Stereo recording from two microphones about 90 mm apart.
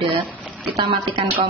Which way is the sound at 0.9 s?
70° right (ahead or behind).